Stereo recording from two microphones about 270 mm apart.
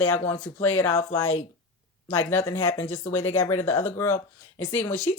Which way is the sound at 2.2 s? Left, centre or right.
Centre.